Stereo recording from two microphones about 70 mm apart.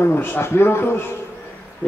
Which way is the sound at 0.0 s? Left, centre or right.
Left.